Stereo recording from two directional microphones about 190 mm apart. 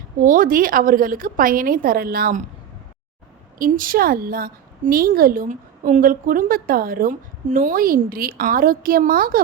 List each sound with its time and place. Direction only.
0.2 s a woman's voice: 45° right (ahead or behind)
3.6 s a woman's voice: 45° right (ahead or behind)